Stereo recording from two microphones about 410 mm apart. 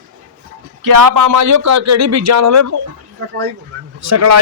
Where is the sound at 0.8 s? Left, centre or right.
Right.